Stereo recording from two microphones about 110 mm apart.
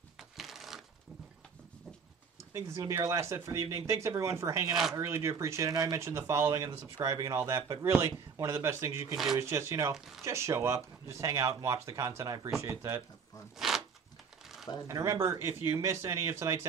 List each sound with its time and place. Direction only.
0.2 s crushing: centre (ahead or behind)
2.5 s speech: 30° right (ahead or behind)
9.1 s speech: 5° right (ahead or behind)
9.4 s speech: 25° right (ahead or behind)
13.6 s zipper: 5° right (ahead or behind)
14.9 s speech: 25° right (ahead or behind)